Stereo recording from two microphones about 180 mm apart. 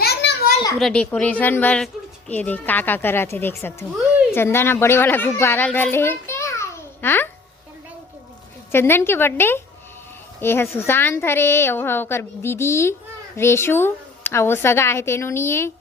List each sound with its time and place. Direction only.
0.0 s children playing: 65° left (ahead or behind)
0.8 s a woman's voice: 5° left (ahead or behind)
8.7 s a woman's voice: 15° left (ahead or behind)